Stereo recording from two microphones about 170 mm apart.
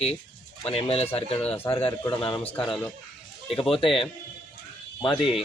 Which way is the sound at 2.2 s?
30° left (ahead or behind).